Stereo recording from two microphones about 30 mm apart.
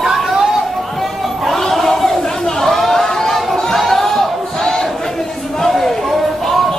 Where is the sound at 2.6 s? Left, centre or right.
Centre.